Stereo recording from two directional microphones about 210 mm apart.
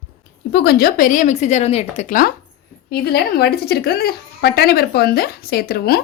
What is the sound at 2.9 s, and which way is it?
Speech, 50° left (ahead or behind).